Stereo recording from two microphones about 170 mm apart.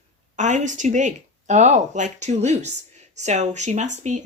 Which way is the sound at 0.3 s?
45° right (ahead or behind).